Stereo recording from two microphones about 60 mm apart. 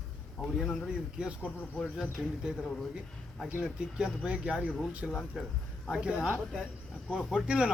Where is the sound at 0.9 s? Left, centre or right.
Centre.